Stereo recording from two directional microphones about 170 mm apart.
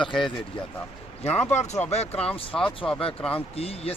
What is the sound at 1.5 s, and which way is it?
Speech, 40° left (ahead or behind).